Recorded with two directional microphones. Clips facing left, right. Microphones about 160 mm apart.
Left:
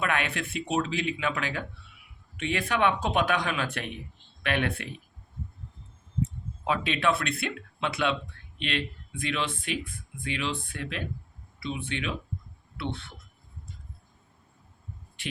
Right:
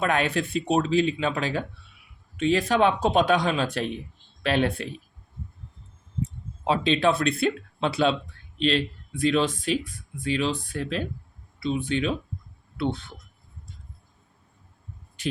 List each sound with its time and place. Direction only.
0.0 s speech: 35° right (ahead or behind)
6.7 s speech: 30° right (ahead or behind)